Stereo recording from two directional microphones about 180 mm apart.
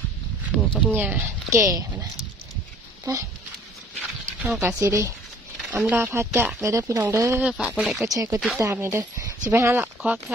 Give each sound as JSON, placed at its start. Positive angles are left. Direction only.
{"t": 0.7, "sound": "speech", "side_deg": 5}
{"t": 0.9, "sound": "speech", "side_deg": -10}
{"t": 4.4, "sound": "speech", "side_deg": -10}
{"t": 7.4, "sound": "speech", "side_deg": -5}
{"t": 8.1, "sound": "speech", "side_deg": -20}